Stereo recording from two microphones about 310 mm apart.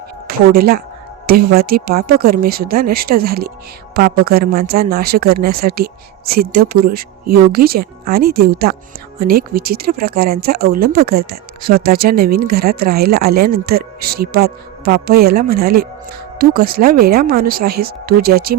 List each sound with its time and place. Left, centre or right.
0.3 s speech: right